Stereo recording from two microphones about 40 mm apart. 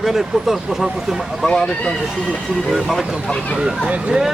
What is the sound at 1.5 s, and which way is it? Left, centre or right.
Speech, centre.